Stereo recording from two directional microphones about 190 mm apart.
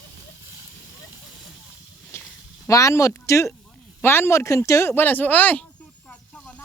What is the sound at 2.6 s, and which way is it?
Speech, 15° left (ahead or behind).